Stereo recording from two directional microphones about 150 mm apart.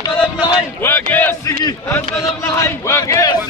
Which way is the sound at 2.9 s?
20° left (ahead or behind).